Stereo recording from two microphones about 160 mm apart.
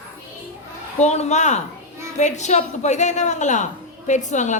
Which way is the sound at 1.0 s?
45° left (ahead or behind).